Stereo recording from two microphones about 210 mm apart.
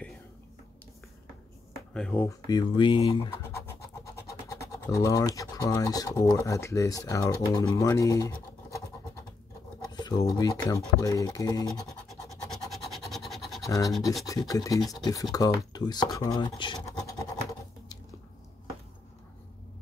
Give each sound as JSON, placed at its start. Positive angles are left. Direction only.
{"t": 2.0, "sound": "speech", "side_deg": 5}
{"t": 2.4, "sound": "speech", "side_deg": 20}
{"t": 9.8, "sound": "speech", "side_deg": 20}
{"t": 11.6, "sound": "scratch", "side_deg": 5}
{"t": 13.7, "sound": "speech", "side_deg": 15}
{"t": 15.3, "sound": "scratch", "side_deg": 15}